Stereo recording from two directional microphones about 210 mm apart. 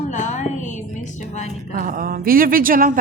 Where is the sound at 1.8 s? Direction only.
40° right (ahead or behind).